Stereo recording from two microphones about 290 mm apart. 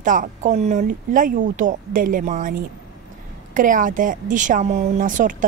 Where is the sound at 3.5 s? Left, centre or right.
Right.